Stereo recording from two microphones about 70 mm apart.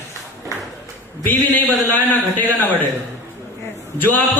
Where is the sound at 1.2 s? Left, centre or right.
Left.